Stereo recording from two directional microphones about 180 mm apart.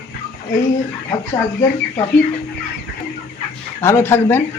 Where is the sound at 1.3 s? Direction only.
15° left (ahead or behind).